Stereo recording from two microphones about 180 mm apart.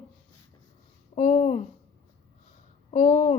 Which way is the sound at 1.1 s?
45° left (ahead or behind).